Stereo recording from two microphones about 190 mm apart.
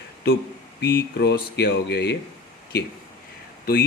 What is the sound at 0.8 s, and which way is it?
A man's voice, 60° left (ahead or behind).